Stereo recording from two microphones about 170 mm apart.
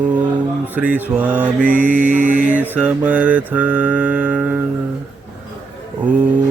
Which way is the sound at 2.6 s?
10° right (ahead or behind).